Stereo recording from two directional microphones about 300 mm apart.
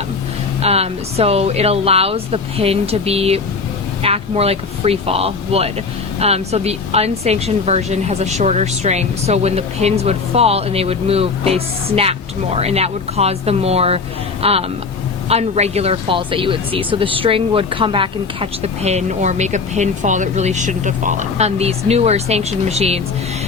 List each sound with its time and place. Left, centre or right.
0.6 s a woman's voice: right